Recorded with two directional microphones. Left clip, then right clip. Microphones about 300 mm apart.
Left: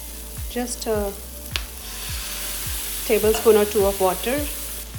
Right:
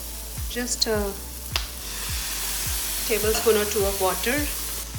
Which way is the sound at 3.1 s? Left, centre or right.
Centre.